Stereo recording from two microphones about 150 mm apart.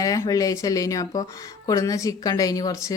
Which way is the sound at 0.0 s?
25° left (ahead or behind).